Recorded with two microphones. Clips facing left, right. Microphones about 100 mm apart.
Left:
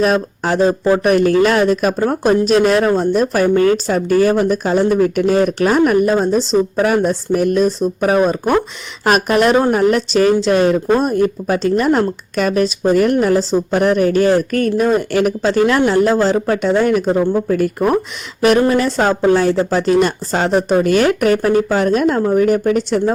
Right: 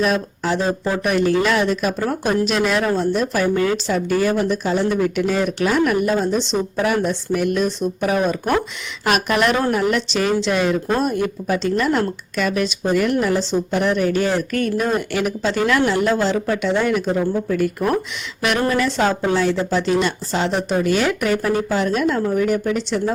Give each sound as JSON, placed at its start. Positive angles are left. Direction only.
{"t": 0.0, "sound": "speech", "side_deg": 45}